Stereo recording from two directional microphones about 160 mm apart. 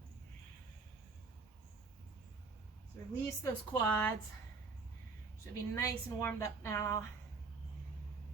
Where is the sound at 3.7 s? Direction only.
10° left (ahead or behind).